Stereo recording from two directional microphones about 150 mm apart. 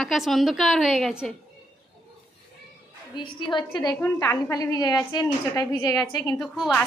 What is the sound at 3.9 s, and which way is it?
A woman's voice, 15° left (ahead or behind).